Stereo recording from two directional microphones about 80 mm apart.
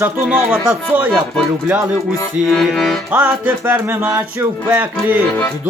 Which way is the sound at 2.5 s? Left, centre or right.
Centre.